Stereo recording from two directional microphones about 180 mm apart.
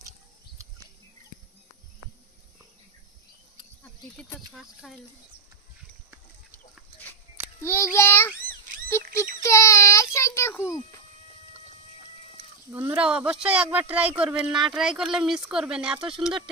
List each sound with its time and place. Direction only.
3.8 s insect: 10° left (ahead or behind)
4.5 s speech: centre (ahead or behind)
7.6 s a child's voice: 15° left (ahead or behind)
8.8 s a sound: 15° left (ahead or behind)
9.4 s child singing: 15° left (ahead or behind)
12.9 s speech: 5° right (ahead or behind)